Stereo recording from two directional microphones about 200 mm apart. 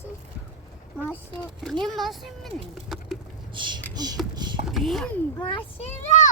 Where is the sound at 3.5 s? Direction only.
25° right (ahead or behind).